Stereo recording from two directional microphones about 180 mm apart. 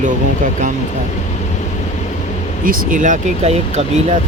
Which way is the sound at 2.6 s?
50° right (ahead or behind).